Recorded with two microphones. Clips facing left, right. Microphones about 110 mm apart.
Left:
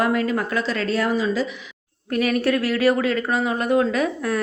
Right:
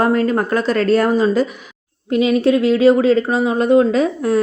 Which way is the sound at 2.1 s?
20° right (ahead or behind).